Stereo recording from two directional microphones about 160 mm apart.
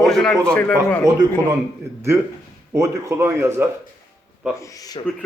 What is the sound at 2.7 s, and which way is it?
Speech, 20° right (ahead or behind).